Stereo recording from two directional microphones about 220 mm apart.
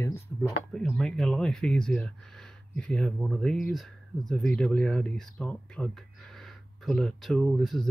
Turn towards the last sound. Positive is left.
turn(degrees=0)  # may be behind; listen again after turning